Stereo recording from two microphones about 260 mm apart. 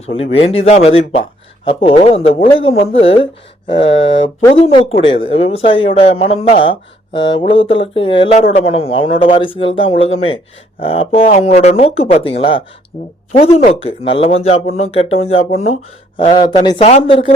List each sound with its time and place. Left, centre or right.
0.0 s a man's voice: left
3.7 s a man's voice: left
3.9 s speech: left
4.4 s a man's voice: left